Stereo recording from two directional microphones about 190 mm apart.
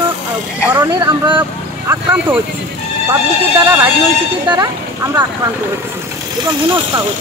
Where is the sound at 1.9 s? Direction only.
10° right (ahead or behind).